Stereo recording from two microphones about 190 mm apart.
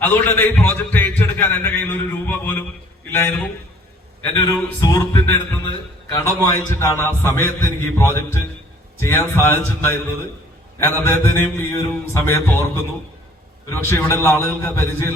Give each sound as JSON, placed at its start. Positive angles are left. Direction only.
{"t": 0.0, "sound": "a man's voice", "side_deg": 10}
{"t": 4.4, "sound": "a sound", "side_deg": 20}
{"t": 6.1, "sound": "a man's voice", "side_deg": 15}
{"t": 13.7, "sound": "a man's voice", "side_deg": 15}